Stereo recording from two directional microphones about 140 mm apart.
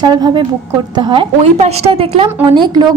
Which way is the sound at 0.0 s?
30° right (ahead or behind).